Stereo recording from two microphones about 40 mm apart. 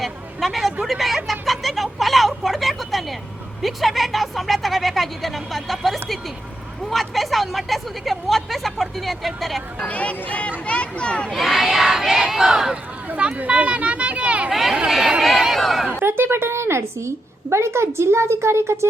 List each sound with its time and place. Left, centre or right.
0.0 s vehicle: centre
0.9 s a sound: centre
3.6 s a woman's voice: centre
9.9 s speech: left
11.3 s speech: centre
13.1 s speech: right
14.5 s speech: centre
15.2 s a sound: centre
15.6 s speech: centre
16.0 s a woman's voice: right